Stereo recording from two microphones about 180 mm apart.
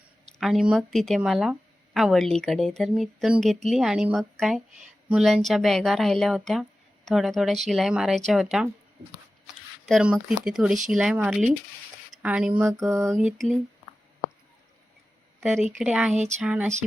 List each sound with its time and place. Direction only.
0.3 s a woman's voice: centre (ahead or behind)
9.8 s a woman's voice: centre (ahead or behind)
12.6 s mantra: 15° right (ahead or behind)
13.1 s a woman's voice: centre (ahead or behind)
15.8 s a woman's voice: 5° right (ahead or behind)
16.1 s a sound: 40° right (ahead or behind)
16.4 s mantra: 5° right (ahead or behind)